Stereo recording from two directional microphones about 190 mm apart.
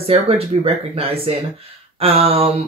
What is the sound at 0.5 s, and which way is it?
Speech, 30° right (ahead or behind).